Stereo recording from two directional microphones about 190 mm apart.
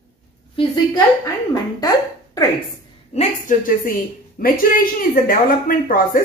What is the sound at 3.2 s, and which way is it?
A woman's voice, 45° left (ahead or behind).